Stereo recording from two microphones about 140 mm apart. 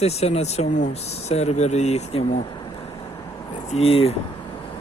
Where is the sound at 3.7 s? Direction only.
45° left (ahead or behind).